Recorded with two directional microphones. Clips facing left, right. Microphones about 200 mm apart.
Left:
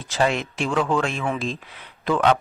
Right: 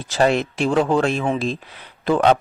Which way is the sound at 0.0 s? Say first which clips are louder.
Right 4 dB; 40° right (ahead or behind).